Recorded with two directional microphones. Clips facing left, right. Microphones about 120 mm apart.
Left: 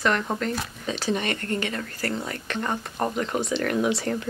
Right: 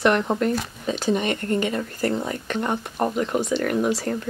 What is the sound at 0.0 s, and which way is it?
Speech, 15° right (ahead or behind).